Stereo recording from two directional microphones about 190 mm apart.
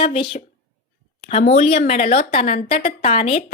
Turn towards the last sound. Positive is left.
turn(degrees=35)  # may be behind; listen again after turning